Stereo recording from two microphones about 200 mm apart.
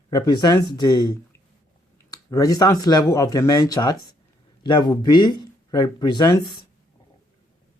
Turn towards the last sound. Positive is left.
turn(degrees=20)  # may be behind; listen again after turning